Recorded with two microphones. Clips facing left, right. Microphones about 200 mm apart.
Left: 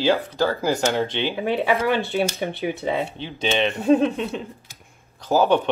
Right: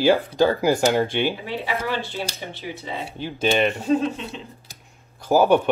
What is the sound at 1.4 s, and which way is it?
Speech, 55° left (ahead or behind).